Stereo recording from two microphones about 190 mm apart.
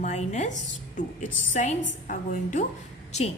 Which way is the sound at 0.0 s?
40° left (ahead or behind).